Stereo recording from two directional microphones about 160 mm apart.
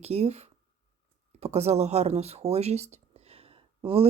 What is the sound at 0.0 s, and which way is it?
Speech, 40° right (ahead or behind).